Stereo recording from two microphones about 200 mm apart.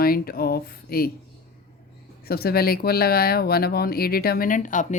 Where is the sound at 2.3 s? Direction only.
50° left (ahead or behind).